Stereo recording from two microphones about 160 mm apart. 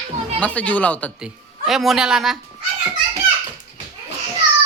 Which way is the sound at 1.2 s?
Centre (ahead or behind).